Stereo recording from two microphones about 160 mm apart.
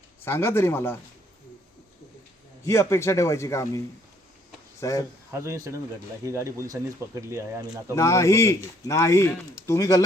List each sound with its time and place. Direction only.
0.3 s speech: 15° left (ahead or behind)
2.6 s speech: 20° left (ahead or behind)
5.3 s speech: 20° right (ahead or behind)
7.9 s speech: 20° left (ahead or behind)